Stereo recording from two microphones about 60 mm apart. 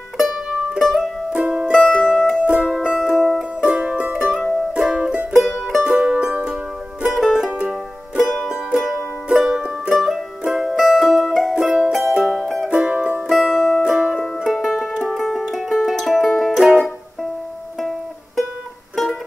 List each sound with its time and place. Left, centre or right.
0.7 s music: centre
2.0 s music: centre
2.6 s music: centre
4.2 s music: centre
5.3 s music: centre
5.9 s music: centre
9.4 s music: centre
9.8 s music: centre
11.5 s music: centre
13.3 s music: centre
14.2 s music: centre
16.5 s music: centre